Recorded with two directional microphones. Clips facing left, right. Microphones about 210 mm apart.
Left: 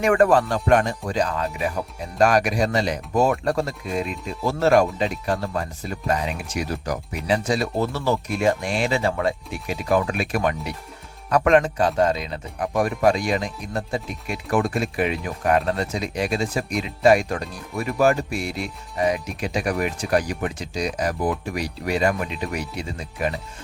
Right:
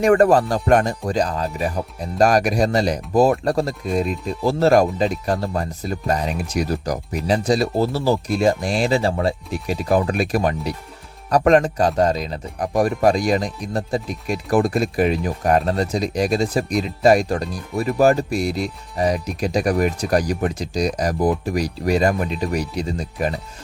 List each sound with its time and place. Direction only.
0.0 s speech: 35° right (ahead or behind)